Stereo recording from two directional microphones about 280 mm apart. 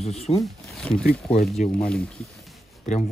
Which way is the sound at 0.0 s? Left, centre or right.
Left.